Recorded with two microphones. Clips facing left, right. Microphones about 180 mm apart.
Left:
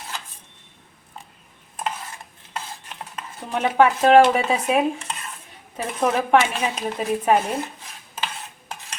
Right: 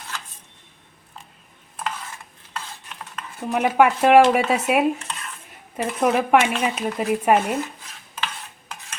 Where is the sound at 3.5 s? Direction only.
10° right (ahead or behind).